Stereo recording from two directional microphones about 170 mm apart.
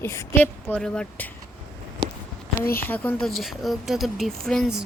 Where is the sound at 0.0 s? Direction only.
15° left (ahead or behind).